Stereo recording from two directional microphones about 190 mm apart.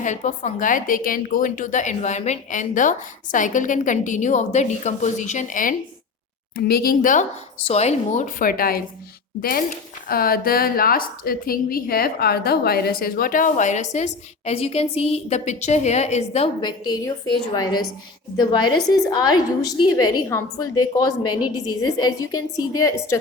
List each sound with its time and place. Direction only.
0.0 s a woman's voice: 40° left (ahead or behind); by 23.1 s 15° left (ahead or behind)